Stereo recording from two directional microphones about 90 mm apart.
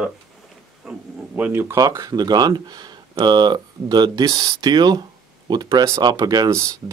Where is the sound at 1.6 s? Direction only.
40° right (ahead or behind).